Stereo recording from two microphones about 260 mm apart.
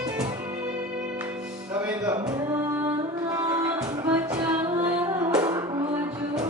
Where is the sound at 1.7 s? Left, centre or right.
Centre.